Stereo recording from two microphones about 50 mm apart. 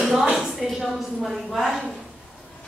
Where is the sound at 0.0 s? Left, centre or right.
Centre.